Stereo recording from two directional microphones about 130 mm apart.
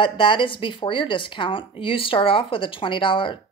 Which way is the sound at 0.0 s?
40° left (ahead or behind).